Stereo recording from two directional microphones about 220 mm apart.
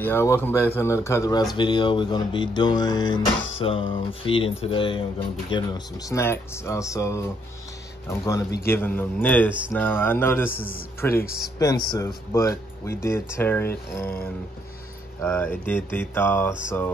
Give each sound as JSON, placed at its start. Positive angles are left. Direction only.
{"t": 0.0, "sound": "speech", "side_deg": 10}
{"t": 15.2, "sound": "speech", "side_deg": 10}